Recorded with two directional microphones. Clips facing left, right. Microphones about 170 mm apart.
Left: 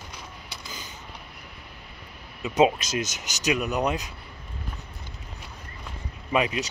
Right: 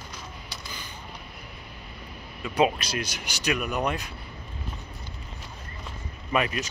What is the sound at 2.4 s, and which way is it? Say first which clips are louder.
Speech: left 3 dB; 20° left (ahead or behind).